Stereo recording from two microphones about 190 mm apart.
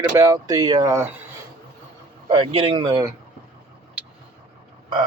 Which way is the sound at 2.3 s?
30° right (ahead or behind).